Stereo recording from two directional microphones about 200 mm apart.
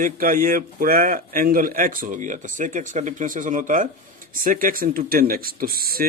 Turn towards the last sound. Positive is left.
turn(degrees=-45)  # may be behind; listen again after turning